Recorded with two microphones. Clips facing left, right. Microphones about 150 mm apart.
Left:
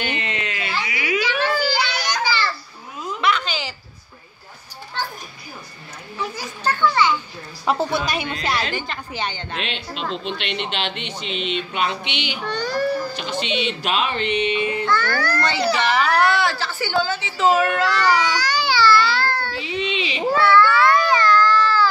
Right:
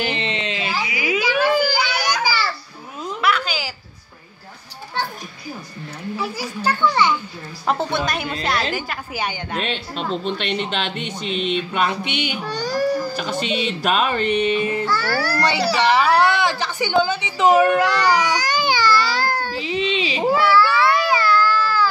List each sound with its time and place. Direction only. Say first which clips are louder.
0.0 s a sound: right 3 dB; 30° right (ahead or behind)
0.8 s children playing: right 1 dB; 15° right (ahead or behind)
3.2 s a sound: right 1 dB; 5° right (ahead or behind)
6.1 s speech: right 1 dB; 10° right (ahead or behind)
7.6 s a woman's voice: even; centre (ahead or behind)
10.4 s a sound: right 3 dB; 40° right (ahead or behind)
12.4 s speech: even; 10° right (ahead or behind)
13.1 s a sound: right 2 dB; 45° right (ahead or behind)
14.9 s speech: even; 10° right (ahead or behind)
18.6 s baby cry: left 3 dB; 15° right (ahead or behind)
18.9 s baby cry: left 1 dB; 40° right (ahead or behind)
19.2 s child singing: right 1 dB; 15° right (ahead or behind)
19.5 s speech: right 3 dB; 35° right (ahead or behind)
20.2 s baby cry: left 1 dB; 10° right (ahead or behind)